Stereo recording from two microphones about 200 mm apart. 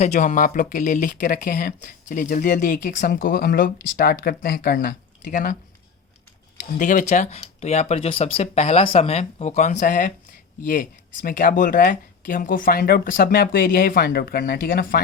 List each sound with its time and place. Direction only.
0.0 s speech: 35° left (ahead or behind)
6.7 s speech: 40° left (ahead or behind)